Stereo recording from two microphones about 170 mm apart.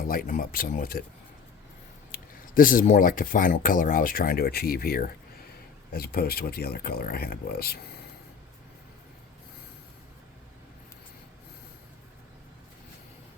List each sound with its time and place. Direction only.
0.1 s speech: 55° left (ahead or behind)
2.1 s speech: 55° left (ahead or behind)